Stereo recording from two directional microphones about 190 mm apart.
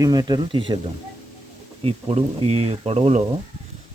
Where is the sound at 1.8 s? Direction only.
30° right (ahead or behind).